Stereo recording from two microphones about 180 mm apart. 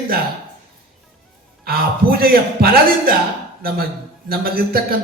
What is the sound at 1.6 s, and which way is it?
A man's voice, 55° right (ahead or behind).